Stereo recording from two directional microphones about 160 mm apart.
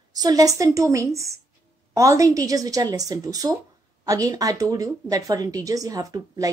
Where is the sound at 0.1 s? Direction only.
25° right (ahead or behind).